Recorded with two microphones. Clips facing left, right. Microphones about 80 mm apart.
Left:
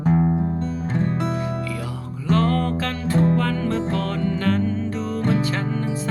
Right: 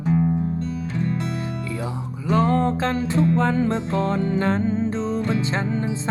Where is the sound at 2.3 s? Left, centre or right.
Centre.